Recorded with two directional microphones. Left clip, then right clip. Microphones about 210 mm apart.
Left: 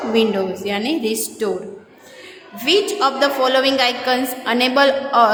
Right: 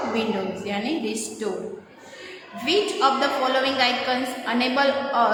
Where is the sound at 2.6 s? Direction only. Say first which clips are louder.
Left 4 dB; 50° left (ahead or behind).